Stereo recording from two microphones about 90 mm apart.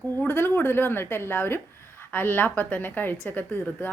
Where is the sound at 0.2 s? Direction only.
25° left (ahead or behind).